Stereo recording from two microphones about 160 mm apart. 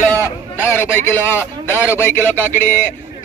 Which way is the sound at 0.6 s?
15° left (ahead or behind).